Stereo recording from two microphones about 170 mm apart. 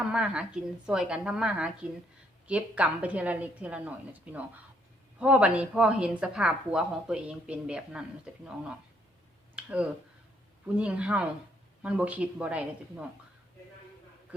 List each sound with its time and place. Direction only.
0.0 s a woman's voice: 5° right (ahead or behind)
9.6 s a sound: 10° right (ahead or behind)
10.8 s speech: 5° right (ahead or behind)